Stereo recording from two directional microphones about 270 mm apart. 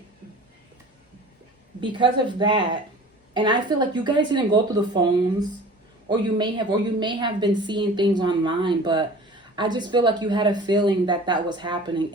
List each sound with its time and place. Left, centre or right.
1.8 s a woman's voice: centre